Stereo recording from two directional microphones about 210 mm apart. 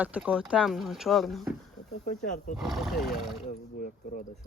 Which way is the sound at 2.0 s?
40° left (ahead or behind).